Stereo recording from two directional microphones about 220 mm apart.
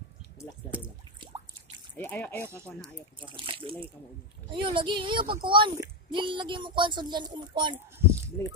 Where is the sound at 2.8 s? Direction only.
20° right (ahead or behind).